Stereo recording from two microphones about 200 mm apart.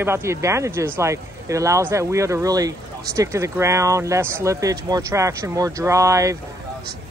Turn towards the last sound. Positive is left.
turn(degrees=-15)  # may be behind; listen again after turning